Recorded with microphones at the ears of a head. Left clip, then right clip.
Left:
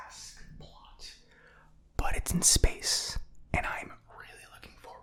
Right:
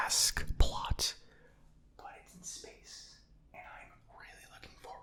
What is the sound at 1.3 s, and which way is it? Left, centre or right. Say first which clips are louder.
Whispering: left 7 dB; left.